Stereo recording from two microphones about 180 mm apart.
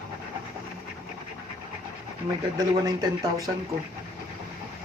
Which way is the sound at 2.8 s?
20° right (ahead or behind).